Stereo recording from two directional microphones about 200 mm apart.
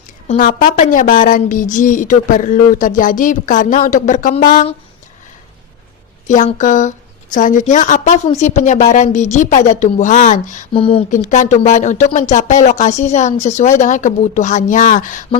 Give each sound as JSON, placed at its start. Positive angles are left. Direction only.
{"t": 0.3, "sound": "a woman's voice", "side_deg": 40}
{"t": 6.2, "sound": "a woman's voice", "side_deg": 40}
{"t": 10.7, "sound": "speech", "side_deg": 25}
{"t": 11.1, "sound": "a woman's voice", "side_deg": 40}